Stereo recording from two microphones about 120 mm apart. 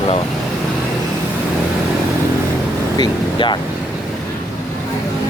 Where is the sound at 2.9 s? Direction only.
40° left (ahead or behind).